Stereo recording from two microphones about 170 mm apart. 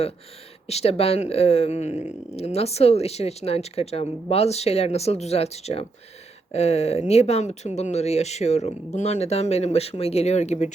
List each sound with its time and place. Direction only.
0.7 s speech: 40° left (ahead or behind)
1.9 s speech: 10° right (ahead or behind)
2.3 s speech: 40° left (ahead or behind)